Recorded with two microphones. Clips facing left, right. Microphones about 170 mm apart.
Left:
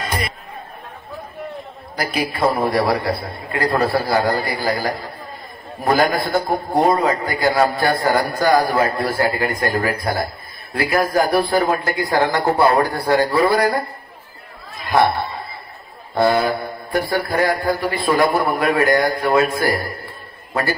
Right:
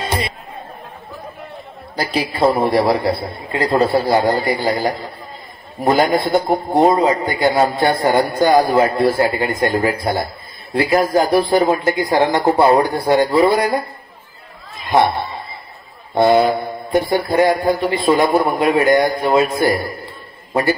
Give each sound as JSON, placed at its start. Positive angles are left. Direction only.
{"t": 2.0, "sound": "a man's voice", "side_deg": -25}
{"t": 14.9, "sound": "speech", "side_deg": -20}
{"t": 16.2, "sound": "a man's voice", "side_deg": -20}